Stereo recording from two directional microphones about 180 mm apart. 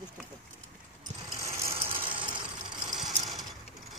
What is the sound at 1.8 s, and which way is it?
Ratchet, 30° right (ahead or behind).